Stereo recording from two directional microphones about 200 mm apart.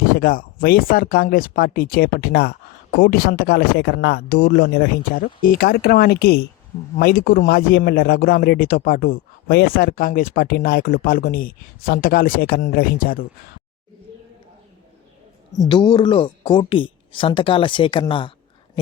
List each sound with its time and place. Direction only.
0.1 s speech: 45° left (ahead or behind)
15.5 s speech: 20° left (ahead or behind)